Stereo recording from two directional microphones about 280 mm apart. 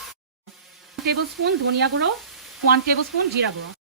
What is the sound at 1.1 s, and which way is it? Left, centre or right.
Speech, right.